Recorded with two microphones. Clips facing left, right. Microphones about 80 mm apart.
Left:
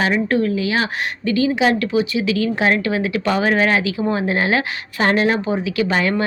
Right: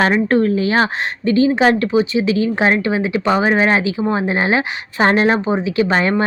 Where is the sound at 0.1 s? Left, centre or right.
Right.